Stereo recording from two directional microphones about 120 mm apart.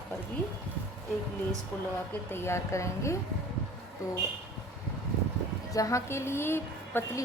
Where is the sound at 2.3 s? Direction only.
20° left (ahead or behind).